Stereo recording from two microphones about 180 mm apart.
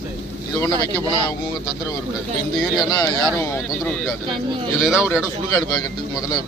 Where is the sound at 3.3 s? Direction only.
10° left (ahead or behind).